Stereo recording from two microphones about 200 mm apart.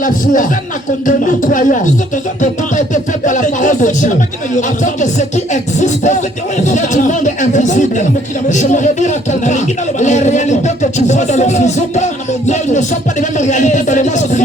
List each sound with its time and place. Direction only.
1.0 s speech: 40° left (ahead or behind)